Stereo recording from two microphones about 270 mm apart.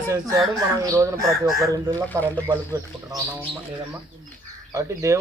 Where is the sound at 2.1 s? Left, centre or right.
Centre.